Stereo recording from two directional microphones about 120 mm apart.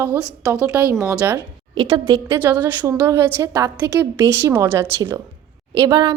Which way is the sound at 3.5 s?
35° right (ahead or behind).